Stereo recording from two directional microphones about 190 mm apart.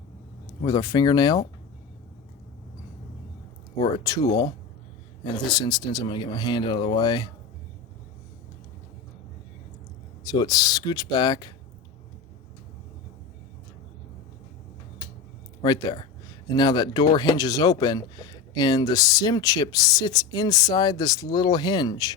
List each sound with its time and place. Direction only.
0.6 s speech: 20° left (ahead or behind)
3.9 s speech: 20° left (ahead or behind)
10.2 s speech: 20° left (ahead or behind)
15.6 s speech: 20° left (ahead or behind)